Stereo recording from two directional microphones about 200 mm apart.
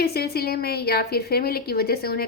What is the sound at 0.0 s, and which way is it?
A woman's voice, 50° left (ahead or behind).